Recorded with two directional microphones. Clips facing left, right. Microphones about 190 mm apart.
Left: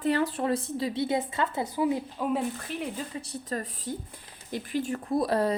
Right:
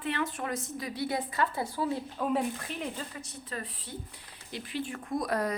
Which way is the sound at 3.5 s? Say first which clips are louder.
Left 7 dB; 45° left (ahead or behind).